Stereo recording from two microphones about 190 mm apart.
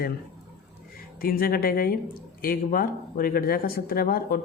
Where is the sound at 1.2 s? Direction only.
50° left (ahead or behind).